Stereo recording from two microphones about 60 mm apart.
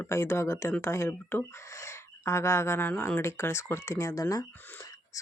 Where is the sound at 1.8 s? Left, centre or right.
Left.